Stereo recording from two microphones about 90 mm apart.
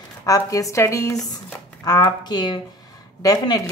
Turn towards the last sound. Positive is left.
turn(degrees=40)  # may be behind; listen again after turning